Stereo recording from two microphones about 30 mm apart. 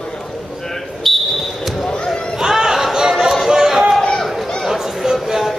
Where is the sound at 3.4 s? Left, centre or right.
Centre.